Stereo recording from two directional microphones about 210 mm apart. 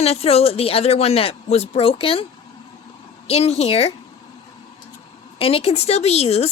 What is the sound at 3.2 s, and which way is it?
Speech, 30° left (ahead or behind).